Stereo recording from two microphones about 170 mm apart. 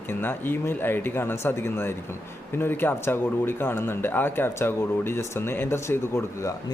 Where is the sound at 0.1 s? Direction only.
10° left (ahead or behind).